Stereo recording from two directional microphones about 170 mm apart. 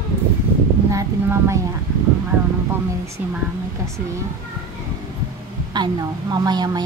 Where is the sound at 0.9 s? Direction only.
15° right (ahead or behind).